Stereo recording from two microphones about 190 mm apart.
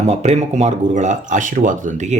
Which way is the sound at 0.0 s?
35° right (ahead or behind).